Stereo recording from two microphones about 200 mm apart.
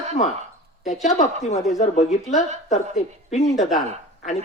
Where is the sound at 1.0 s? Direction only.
35° left (ahead or behind).